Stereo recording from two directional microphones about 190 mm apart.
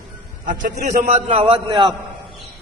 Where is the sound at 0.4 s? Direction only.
40° right (ahead or behind).